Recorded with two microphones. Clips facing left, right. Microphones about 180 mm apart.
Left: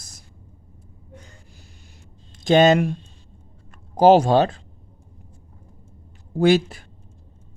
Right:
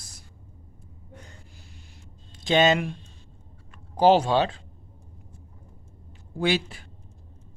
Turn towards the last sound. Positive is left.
turn(degrees=45)  # may be behind; listen again after turning